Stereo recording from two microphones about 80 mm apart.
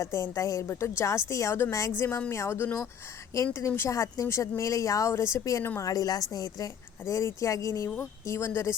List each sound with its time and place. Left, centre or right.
0.0 s a woman's voice: left
5.8 s a woman's voice: left
7.0 s a woman's voice: left